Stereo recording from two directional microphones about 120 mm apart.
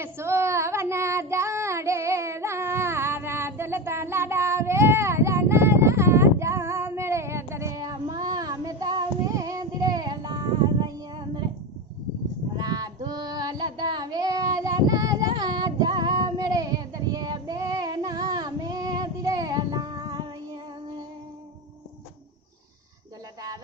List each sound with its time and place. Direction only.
0.0 s child singing: 20° right (ahead or behind); by 11.4 s 40° right (ahead or behind)
12.5 s child singing: 35° right (ahead or behind)